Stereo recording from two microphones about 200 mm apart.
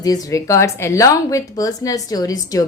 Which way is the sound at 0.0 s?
20° left (ahead or behind).